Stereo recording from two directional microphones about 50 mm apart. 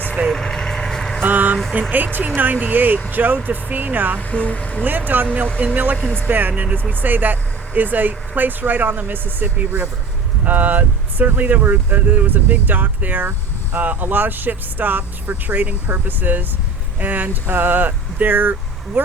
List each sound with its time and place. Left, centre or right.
0.3 s vehicle: centre
1.2 s speech: right
4.2 s speech: left
4.8 s speech: right